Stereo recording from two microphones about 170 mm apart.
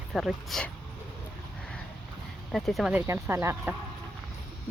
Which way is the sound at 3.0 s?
15° right (ahead or behind).